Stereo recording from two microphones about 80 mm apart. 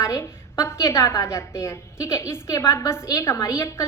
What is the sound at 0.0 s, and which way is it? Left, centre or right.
A woman's voice, left.